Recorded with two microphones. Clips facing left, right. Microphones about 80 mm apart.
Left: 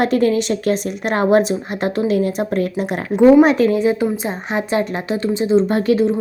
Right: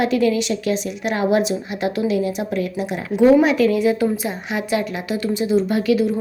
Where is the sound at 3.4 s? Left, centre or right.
Left.